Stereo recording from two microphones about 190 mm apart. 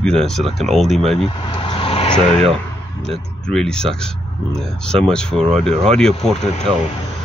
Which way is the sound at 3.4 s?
5° left (ahead or behind).